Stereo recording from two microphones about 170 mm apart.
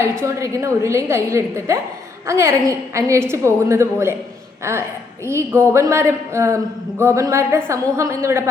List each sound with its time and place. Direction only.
0.2 s a woman's voice: 15° right (ahead or behind)